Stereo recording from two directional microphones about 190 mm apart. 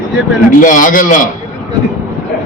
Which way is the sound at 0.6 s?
45° left (ahead or behind).